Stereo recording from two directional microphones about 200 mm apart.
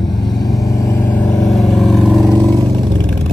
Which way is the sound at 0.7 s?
15° left (ahead or behind).